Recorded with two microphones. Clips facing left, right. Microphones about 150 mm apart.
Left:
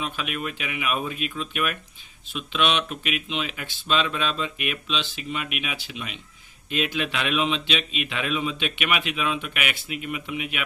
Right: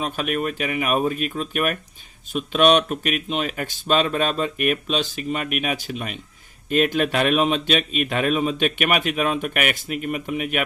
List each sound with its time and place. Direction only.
0.0 s a man's voice: 45° right (ahead or behind)